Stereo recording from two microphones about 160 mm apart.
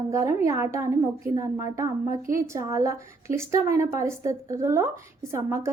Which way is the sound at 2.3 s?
20° right (ahead or behind).